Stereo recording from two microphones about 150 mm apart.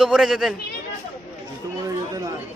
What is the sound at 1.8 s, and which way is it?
Speech, 25° right (ahead or behind).